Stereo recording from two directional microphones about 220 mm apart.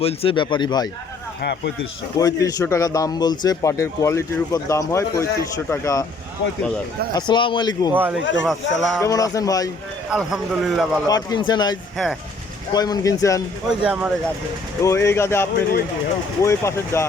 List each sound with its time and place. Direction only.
0.0 s speech: 25° left (ahead or behind)
1.4 s speech: 50° left (ahead or behind)
2.1 s a man's voice: 15° left (ahead or behind)
7.1 s speech: 20° left (ahead or behind)
7.9 s a man's voice: 10° right (ahead or behind)
9.0 s a man's voice: 15° left (ahead or behind)
10.1 s a man's voice: 5° right (ahead or behind)
11.1 s a man's voice: 20° left (ahead or behind)
13.7 s a man's voice: 5° right (ahead or behind)
14.8 s a man's voice: 10° left (ahead or behind)